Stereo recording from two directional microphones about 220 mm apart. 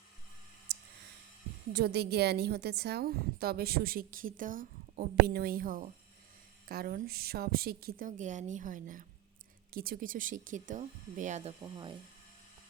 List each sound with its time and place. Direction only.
0.7 s clicking: 50° right (ahead or behind)
1.7 s a woman's voice: 50° right (ahead or behind); by 11.5 s 30° right (ahead or behind)
11.6 s speech: 20° right (ahead or behind)